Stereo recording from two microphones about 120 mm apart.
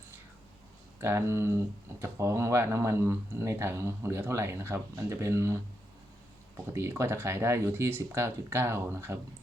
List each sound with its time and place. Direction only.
1.0 s speech: 20° right (ahead or behind)
6.7 s speech: 20° right (ahead or behind)